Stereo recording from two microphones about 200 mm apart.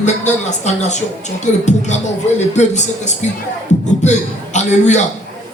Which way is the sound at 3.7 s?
35° left (ahead or behind).